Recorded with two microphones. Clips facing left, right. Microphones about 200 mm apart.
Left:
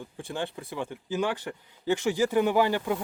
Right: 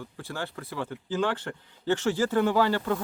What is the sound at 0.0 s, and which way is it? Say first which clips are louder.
Speech: left 2 dB; 15° left (ahead or behind).